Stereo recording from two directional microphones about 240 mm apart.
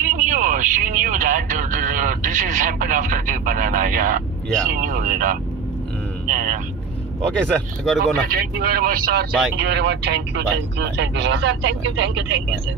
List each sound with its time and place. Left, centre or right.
0.0 s a sound: right
4.6 s speech: right
7.4 s speech: centre
8.3 s speech: right